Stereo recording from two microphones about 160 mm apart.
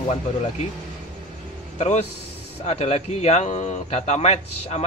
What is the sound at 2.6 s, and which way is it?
A man's voice, 40° left (ahead or behind).